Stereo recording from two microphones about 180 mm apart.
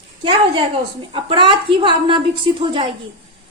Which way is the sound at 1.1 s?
25° right (ahead or behind).